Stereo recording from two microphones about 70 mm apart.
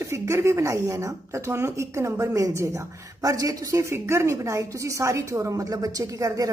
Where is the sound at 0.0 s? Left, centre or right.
Right.